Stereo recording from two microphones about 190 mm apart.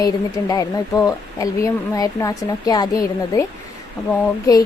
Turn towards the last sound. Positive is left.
turn(degrees=20)  # may be behind; listen again after turning